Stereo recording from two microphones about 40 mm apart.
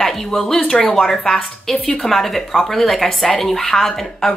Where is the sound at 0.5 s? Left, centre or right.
Left.